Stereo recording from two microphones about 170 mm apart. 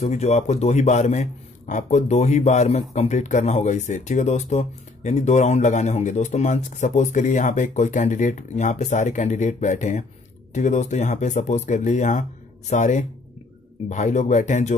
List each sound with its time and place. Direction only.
0.0 s a man's voice: 40° left (ahead or behind)